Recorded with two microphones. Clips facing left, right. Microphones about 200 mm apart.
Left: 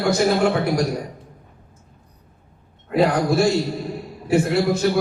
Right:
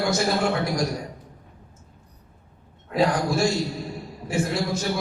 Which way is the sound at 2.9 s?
60° left (ahead or behind).